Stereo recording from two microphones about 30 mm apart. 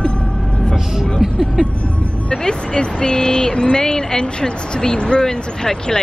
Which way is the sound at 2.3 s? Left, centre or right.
Left.